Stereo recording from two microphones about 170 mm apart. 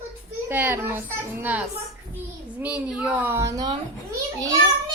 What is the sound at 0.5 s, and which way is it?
A child's voice, 10° right (ahead or behind).